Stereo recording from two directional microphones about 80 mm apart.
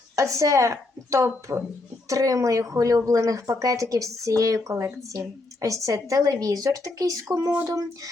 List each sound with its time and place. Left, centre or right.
0.2 s speech: right